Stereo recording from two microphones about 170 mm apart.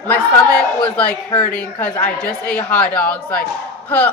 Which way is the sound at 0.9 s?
5° left (ahead or behind).